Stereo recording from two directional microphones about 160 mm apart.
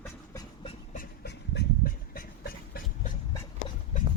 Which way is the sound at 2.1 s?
70° left (ahead or behind).